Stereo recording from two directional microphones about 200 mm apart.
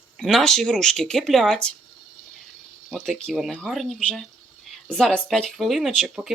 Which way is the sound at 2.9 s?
Centre (ahead or behind).